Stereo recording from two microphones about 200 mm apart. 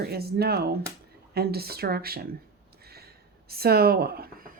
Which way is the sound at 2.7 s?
50° right (ahead or behind).